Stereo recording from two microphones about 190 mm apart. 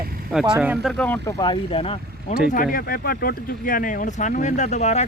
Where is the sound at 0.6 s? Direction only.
5° right (ahead or behind).